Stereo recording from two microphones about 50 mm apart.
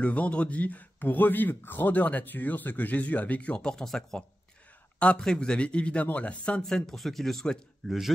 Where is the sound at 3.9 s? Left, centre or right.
Centre.